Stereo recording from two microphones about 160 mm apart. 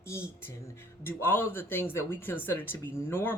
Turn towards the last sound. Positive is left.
turn(degrees=15)  # may be behind; listen again after turning